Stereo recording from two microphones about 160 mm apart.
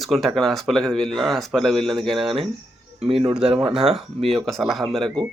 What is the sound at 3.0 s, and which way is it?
Speech, 35° right (ahead or behind).